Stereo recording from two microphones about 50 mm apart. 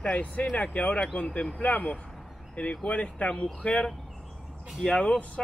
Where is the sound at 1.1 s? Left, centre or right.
Centre.